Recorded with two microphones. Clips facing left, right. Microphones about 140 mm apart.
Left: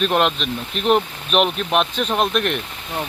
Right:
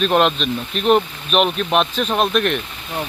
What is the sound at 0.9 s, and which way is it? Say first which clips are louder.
Speech: right 2 dB; 20° right (ahead or behind).